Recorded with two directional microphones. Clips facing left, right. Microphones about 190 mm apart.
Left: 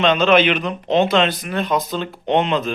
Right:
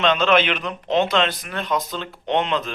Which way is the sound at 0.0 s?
5° left (ahead or behind).